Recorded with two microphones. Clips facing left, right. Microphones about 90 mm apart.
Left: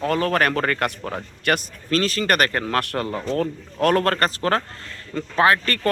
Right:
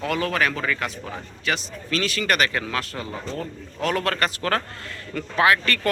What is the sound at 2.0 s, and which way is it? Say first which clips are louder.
A man's voice: left 2 dB; 40° left (ahead or behind).